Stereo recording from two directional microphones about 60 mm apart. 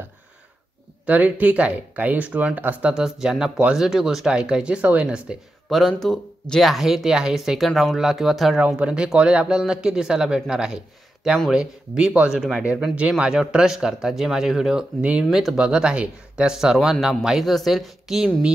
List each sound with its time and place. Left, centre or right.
1.0 s speech: right
2.9 s speech: centre
5.7 s speech: centre
8.5 s speech: right
12.4 s speech: centre
15.0 s speech: right
15.3 s speech: centre